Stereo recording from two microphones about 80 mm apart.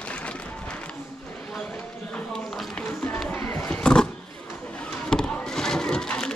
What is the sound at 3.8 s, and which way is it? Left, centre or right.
Roaring cats, centre.